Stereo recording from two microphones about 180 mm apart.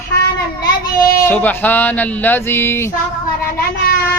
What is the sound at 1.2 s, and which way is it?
Speech, 10° left (ahead or behind).